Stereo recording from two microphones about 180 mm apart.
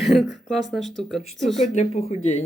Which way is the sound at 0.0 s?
Centre (ahead or behind).